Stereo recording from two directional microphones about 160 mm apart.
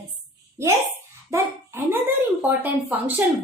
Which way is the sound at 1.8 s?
15° right (ahead or behind).